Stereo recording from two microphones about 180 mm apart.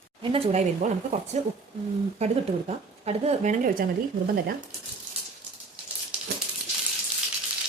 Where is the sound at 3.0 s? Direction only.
35° right (ahead or behind); by 4.6 s 55° right (ahead or behind).